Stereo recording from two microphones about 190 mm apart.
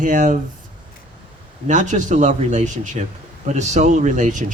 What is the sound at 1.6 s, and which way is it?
A man's voice, 40° right (ahead or behind).